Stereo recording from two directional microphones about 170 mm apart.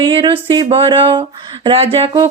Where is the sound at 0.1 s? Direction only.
30° right (ahead or behind).